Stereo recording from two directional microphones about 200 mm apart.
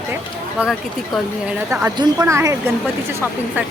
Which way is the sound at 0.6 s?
5° right (ahead or behind).